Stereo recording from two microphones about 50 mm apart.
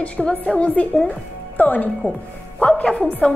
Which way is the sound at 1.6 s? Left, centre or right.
Left.